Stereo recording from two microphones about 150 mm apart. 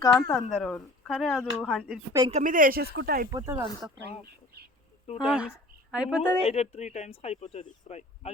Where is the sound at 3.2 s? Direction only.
20° right (ahead or behind).